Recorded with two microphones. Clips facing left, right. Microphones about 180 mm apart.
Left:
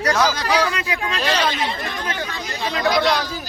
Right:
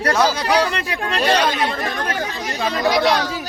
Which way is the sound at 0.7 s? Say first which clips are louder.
Right 2 dB; 60° right (ahead or behind).